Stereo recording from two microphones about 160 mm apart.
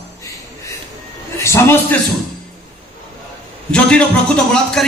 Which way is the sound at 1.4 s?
15° left (ahead or behind).